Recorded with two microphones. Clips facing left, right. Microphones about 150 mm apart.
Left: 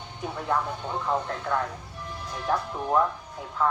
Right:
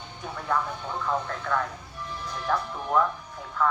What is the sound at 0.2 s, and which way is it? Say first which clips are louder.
Speech: left 1 dB; 25° left (ahead or behind).